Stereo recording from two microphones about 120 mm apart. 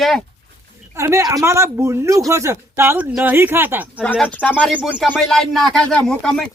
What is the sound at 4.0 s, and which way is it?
Speech, 10° left (ahead or behind).